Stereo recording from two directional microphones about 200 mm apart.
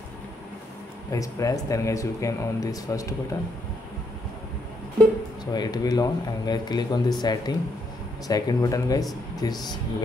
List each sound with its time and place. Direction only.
1.1 s speech: 15° left (ahead or behind)
5.4 s speech: 20° left (ahead or behind)